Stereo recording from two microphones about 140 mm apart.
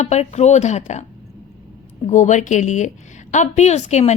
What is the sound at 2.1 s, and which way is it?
A woman's voice, 60° left (ahead or behind).